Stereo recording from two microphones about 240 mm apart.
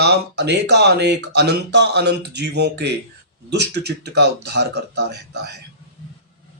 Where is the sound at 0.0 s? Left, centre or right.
Right.